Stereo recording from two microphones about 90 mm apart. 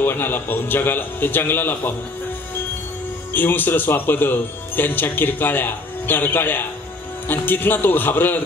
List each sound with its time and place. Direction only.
0.0 s speech: 25° left (ahead or behind)
3.3 s speech: 20° left (ahead or behind)